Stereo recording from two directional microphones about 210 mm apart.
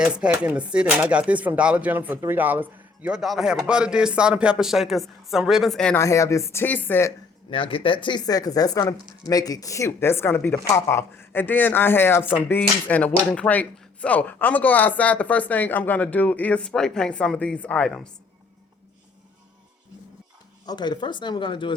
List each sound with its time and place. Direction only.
0.0 s speech: 5° right (ahead or behind)
7.5 s speech: 25° left (ahead or behind); by 18.1 s 5° left (ahead or behind)
20.7 s speech: 20° left (ahead or behind)